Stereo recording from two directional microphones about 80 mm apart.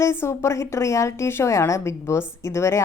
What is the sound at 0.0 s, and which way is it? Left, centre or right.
A woman's voice, left.